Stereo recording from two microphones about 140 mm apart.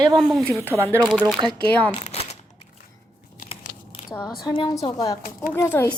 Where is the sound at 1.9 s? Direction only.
45° left (ahead or behind).